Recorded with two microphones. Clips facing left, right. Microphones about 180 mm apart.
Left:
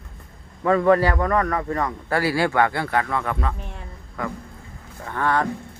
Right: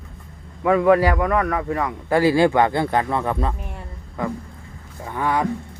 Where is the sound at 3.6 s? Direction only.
15° right (ahead or behind).